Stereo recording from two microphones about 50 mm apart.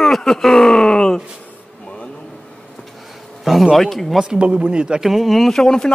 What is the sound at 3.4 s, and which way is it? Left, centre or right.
Speech, centre.